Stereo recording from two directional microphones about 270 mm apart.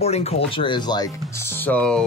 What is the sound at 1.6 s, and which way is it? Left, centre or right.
Speech, centre.